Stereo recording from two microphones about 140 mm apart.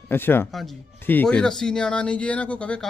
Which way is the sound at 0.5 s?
Centre (ahead or behind).